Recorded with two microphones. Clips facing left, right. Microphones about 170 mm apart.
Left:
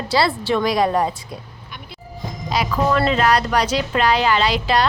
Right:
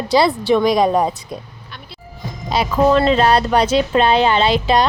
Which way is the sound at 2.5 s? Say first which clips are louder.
Right 5 dB; 25° right (ahead or behind).